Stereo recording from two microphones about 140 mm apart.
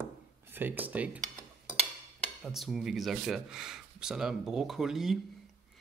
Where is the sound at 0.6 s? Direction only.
10° right (ahead or behind).